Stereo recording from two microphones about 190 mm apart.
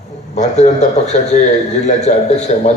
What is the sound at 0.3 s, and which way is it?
A man's voice, 35° left (ahead or behind).